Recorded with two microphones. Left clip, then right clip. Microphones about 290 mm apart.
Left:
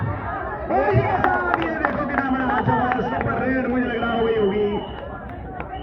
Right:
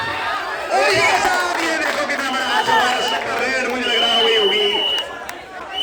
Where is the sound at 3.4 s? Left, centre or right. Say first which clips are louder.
Right 3 dB; right.